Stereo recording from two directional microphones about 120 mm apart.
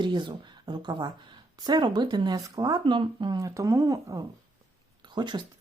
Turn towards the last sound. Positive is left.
turn(degrees=-40)  # may be behind; listen again after turning